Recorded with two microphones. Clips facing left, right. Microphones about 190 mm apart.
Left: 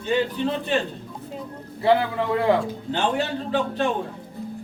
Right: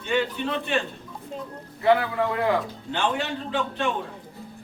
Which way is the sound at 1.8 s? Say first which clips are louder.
Left 1 dB; 30° left (ahead or behind).